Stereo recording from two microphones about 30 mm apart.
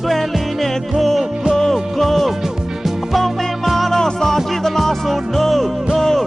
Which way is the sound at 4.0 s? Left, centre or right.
Centre.